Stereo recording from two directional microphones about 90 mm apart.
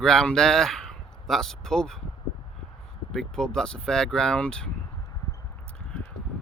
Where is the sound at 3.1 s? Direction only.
5° left (ahead or behind).